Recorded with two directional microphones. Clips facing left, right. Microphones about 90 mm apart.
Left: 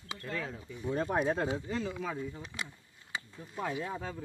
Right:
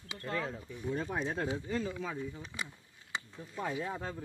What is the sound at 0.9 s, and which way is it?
Speech, 50° left (ahead or behind).